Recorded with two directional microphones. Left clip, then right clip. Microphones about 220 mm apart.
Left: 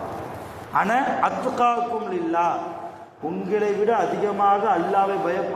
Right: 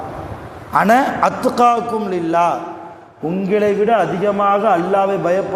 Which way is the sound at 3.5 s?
50° right (ahead or behind).